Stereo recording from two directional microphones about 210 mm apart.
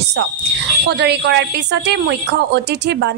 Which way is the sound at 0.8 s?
55° right (ahead or behind).